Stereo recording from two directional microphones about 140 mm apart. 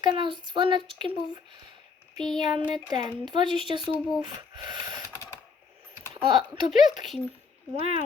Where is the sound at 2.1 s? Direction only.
5° left (ahead or behind).